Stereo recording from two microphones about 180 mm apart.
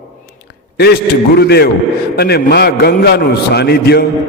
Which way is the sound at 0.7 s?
60° left (ahead or behind).